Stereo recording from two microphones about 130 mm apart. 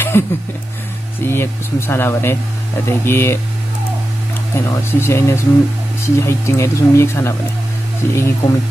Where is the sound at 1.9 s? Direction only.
20° left (ahead or behind).